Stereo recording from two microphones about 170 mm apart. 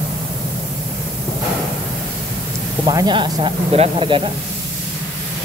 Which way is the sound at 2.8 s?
25° right (ahead or behind).